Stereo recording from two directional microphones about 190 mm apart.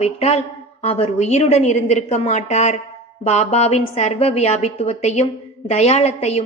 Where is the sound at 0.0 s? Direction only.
35° left (ahead or behind).